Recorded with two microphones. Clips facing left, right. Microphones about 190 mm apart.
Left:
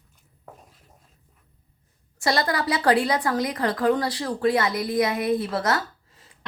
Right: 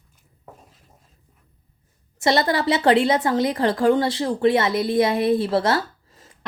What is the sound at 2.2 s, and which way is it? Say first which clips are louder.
A woman's voice: right 4 dB; 25° right (ahead or behind).